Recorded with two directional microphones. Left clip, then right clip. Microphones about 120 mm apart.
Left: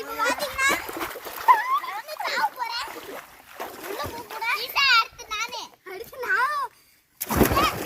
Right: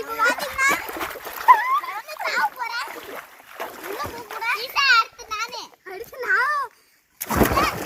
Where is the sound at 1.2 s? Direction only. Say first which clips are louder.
Right 4 dB; 50° right (ahead or behind).